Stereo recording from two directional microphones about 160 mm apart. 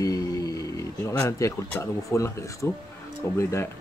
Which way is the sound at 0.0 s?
20° left (ahead or behind).